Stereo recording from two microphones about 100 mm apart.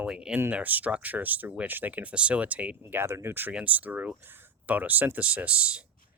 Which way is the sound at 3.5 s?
15° right (ahead or behind).